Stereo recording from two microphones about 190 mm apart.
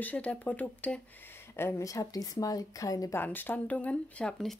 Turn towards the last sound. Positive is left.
turn(degrees=5)  # may be behind; listen again after turning